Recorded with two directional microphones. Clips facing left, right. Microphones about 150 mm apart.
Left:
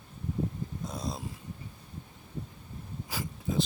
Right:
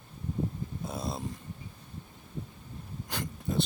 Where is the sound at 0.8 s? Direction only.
5° right (ahead or behind).